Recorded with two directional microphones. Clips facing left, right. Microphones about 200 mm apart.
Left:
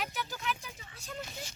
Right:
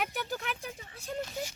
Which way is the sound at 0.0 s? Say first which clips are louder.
Right 3 dB; 55° right (ahead or behind).